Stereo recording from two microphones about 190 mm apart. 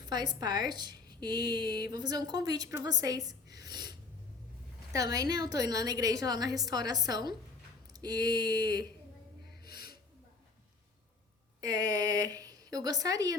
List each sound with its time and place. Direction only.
0.0 s a woman's voice: 20° right (ahead or behind)
9.6 s a sound: 55° left (ahead or behind)
11.6 s a woman's voice: 20° right (ahead or behind)